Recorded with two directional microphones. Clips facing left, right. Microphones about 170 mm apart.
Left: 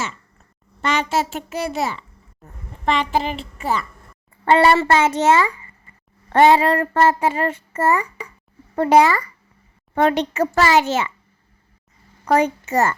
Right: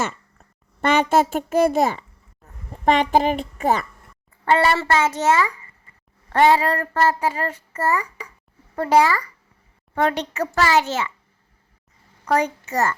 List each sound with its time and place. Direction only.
0.8 s a child's voice: 55° right (ahead or behind)
4.4 s child singing: 25° left (ahead or behind)
12.2 s a child's voice: 25° left (ahead or behind)